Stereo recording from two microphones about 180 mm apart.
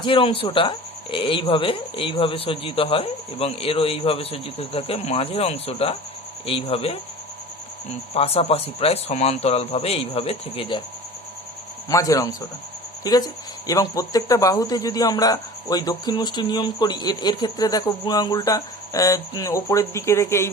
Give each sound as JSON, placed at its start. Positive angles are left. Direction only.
{"t": 0.0, "sound": "speech", "side_deg": 30}
{"t": 8.1, "sound": "speech", "side_deg": 35}
{"t": 11.9, "sound": "speech", "side_deg": 20}